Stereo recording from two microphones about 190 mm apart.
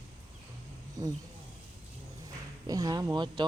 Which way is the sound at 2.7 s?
20° right (ahead or behind).